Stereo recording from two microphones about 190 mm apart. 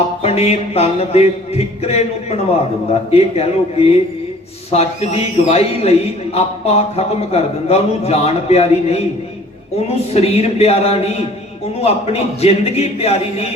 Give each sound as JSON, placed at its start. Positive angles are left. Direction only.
{"t": 0.2, "sound": "speech", "side_deg": 35}
{"t": 10.2, "sound": "speech", "side_deg": 35}